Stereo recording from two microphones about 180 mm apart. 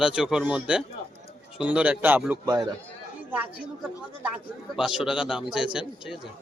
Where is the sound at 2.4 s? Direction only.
20° right (ahead or behind).